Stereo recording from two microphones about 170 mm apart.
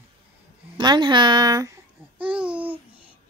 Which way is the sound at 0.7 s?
25° right (ahead or behind).